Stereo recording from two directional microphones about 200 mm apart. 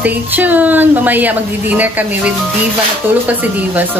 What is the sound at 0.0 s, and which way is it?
Speech, 10° right (ahead or behind).